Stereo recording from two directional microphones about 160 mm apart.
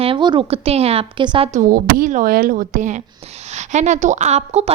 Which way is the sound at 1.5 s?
60° right (ahead or behind).